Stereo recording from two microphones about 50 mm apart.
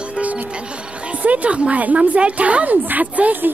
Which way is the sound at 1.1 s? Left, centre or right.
Right.